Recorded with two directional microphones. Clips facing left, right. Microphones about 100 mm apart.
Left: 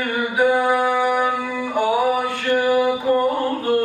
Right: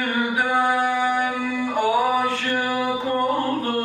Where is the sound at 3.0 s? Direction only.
15° left (ahead or behind).